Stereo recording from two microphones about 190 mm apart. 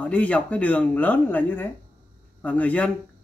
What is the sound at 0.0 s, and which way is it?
Speech, 5° left (ahead or behind).